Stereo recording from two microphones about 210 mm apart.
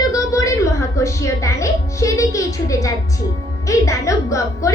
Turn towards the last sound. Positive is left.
turn(degrees=15)  # may be behind; listen again after turning